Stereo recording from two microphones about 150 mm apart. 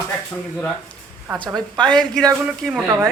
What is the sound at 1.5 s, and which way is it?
Speech, 30° right (ahead or behind).